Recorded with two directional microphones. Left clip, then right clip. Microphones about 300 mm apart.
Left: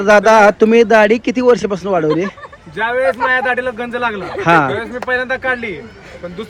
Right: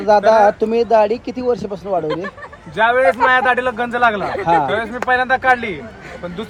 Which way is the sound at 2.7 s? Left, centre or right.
Centre.